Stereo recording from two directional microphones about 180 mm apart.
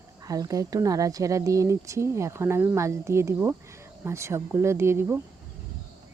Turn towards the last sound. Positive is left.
turn(degrees=-15)  # may be behind; listen again after turning